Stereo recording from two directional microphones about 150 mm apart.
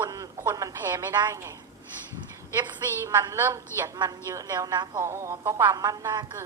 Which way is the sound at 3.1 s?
20° right (ahead or behind).